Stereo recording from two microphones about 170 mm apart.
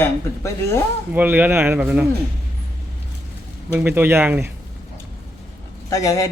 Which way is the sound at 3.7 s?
10° right (ahead or behind).